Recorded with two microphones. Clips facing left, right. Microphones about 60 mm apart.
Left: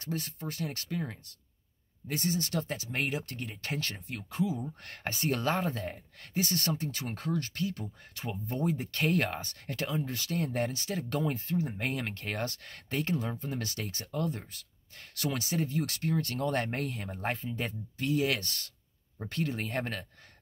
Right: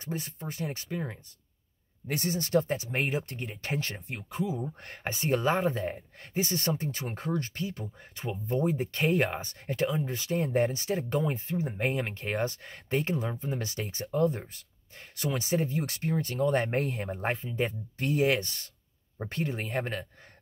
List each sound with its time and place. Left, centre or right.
0.0 s speech: centre
2.0 s speech: right
8.3 s speech: centre
8.6 s speech: right
16.2 s speech: centre; by 18.3 s right
18.3 s speech: centre